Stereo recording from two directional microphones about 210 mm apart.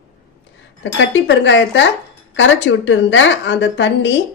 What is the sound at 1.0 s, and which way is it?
A woman's voice, 60° left (ahead or behind).